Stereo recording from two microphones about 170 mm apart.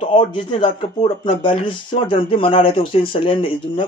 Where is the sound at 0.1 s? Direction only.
30° left (ahead or behind).